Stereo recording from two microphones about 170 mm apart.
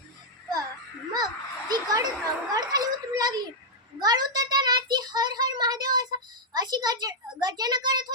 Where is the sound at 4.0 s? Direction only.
25° right (ahead or behind).